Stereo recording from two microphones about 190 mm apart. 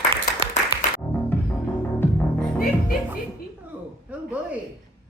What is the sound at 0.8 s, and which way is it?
Music, 40° left (ahead or behind).